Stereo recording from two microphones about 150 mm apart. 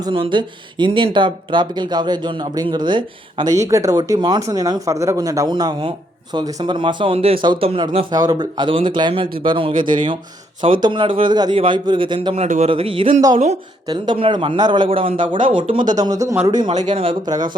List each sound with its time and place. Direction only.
0.0 s speech: 30° right (ahead or behind)
8.1 s speech: 25° right (ahead or behind); by 12.7 s 50° right (ahead or behind)
12.7 s speech: 35° right (ahead or behind)